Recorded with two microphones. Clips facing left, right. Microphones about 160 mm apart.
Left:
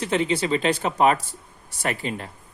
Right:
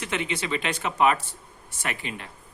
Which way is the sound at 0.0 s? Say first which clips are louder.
Left 7 dB; 35° left (ahead or behind).